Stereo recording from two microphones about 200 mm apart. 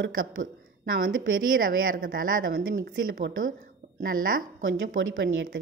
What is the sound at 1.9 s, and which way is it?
Speech, 45° right (ahead or behind).